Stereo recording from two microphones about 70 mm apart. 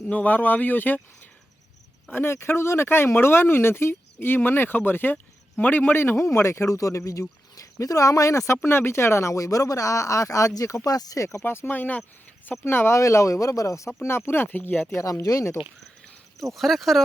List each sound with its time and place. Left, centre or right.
0.0 s speech: left
11.2 s speech: left
11.4 s speech: left
15.2 s speech: left
16.4 s speech: centre